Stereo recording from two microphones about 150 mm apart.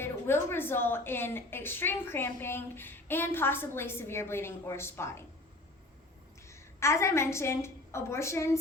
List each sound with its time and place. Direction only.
0.0 s a woman's voice: 15° left (ahead or behind)
6.5 s a woman's voice: 20° left (ahead or behind)